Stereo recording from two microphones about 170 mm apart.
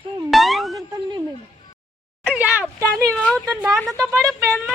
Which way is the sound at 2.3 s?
5° right (ahead or behind).